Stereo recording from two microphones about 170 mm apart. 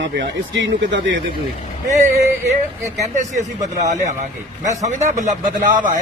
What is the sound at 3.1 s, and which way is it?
Speech, 45° right (ahead or behind).